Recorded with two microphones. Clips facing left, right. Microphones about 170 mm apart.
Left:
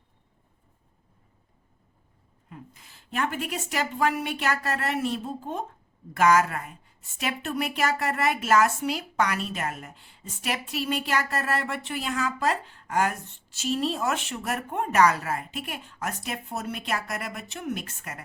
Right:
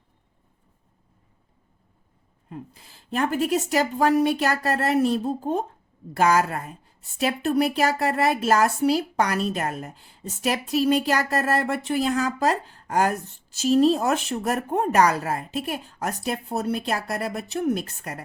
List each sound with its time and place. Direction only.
2.5 s a woman's voice: 35° right (ahead or behind)